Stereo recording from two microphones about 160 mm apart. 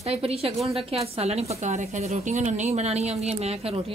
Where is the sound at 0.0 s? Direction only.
40° right (ahead or behind).